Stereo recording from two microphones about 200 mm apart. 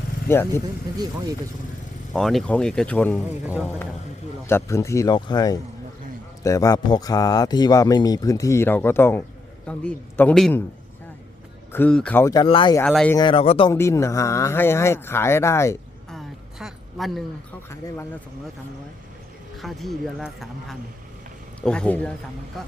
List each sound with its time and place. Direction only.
0.3 s speech: 10° left (ahead or behind)
2.1 s speech: 5° left (ahead or behind)
3.4 s speech: 10° right (ahead or behind)
4.4 s speech: 15° left (ahead or behind)
11.7 s speech: 5° left (ahead or behind); by 12.8 s 25° left (ahead or behind)
12.8 s speech: 5° left (ahead or behind)
13.1 s speech: 25° left (ahead or behind)
13.7 s speech: 15° left (ahead or behind)
16.0 s a sound: centre (ahead or behind)
17.7 s speech: 10° left (ahead or behind)
19.5 s speech: centre (ahead or behind)